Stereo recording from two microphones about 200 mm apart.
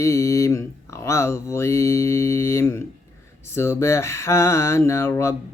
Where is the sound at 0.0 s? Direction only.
15° left (ahead or behind).